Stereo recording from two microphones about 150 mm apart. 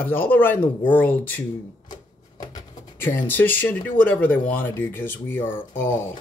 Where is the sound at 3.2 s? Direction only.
15° left (ahead or behind).